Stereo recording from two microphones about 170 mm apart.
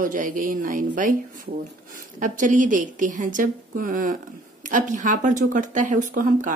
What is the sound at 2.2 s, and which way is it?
Speech, 50° right (ahead or behind).